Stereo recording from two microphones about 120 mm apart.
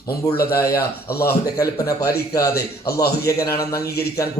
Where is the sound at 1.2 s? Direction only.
30° left (ahead or behind).